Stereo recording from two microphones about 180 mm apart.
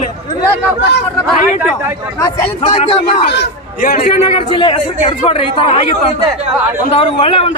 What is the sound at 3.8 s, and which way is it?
A man's voice, 45° left (ahead or behind).